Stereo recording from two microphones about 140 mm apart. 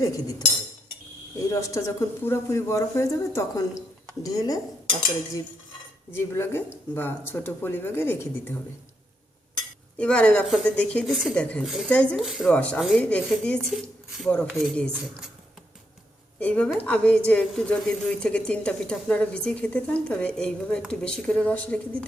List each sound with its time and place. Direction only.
0.0 s speech: 25° left (ahead or behind)
1.5 s a woman's voice: 20° left (ahead or behind)
10.0 s a woman's voice: 10° left (ahead or behind)
12.1 s speech: 5° right (ahead or behind)
12.5 s a woman's voice: 10° left (ahead or behind)
16.4 s a woman's voice: 10° left (ahead or behind)